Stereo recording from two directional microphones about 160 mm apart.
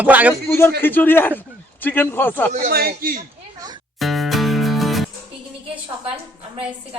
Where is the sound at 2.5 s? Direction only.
70° right (ahead or behind).